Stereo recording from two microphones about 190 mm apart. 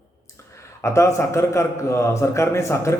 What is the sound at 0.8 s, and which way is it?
A man's voice, 15° left (ahead or behind).